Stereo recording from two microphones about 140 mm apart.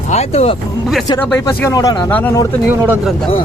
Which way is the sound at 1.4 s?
25° left (ahead or behind).